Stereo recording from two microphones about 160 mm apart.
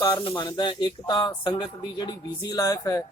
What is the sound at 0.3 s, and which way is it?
A man's voice, 30° left (ahead or behind).